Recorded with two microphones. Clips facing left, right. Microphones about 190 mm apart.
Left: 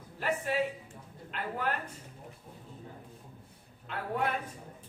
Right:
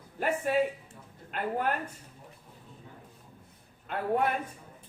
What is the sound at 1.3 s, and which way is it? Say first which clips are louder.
Speech: right 5 dB; 50° right (ahead or behind).